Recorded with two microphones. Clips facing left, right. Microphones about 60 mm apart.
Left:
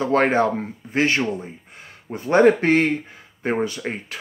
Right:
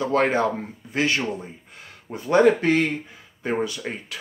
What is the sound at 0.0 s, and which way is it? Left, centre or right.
Speech, left.